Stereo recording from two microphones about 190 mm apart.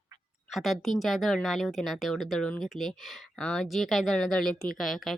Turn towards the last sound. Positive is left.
turn(degrees=0)  # may be behind; listen again after turning